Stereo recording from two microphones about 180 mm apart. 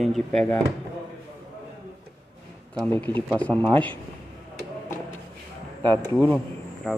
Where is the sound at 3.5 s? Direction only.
15° right (ahead or behind).